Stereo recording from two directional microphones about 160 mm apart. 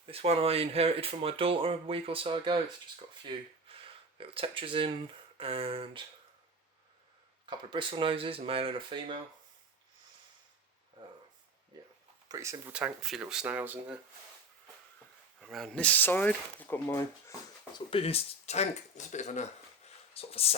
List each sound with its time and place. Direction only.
0.0 s speech: 40° right (ahead or behind)
4.2 s speech: 35° right (ahead or behind)
7.4 s speech: 30° right (ahead or behind)
12.3 s speech: 20° right (ahead or behind)
12.7 s speech: 5° right (ahead or behind)
15.4 s speech: centre (ahead or behind); by 17.3 s 15° left (ahead or behind)
17.7 s speech: 35° left (ahead or behind)